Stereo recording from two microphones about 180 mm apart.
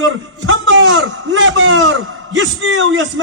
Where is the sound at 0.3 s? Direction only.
90° right.